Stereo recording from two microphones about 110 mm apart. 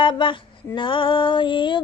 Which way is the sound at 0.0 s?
50° left (ahead or behind).